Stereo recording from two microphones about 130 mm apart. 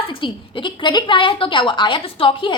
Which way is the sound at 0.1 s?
40° left (ahead or behind).